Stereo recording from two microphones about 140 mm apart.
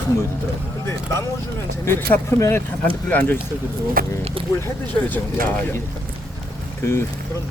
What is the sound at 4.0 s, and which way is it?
Speech, 90° right.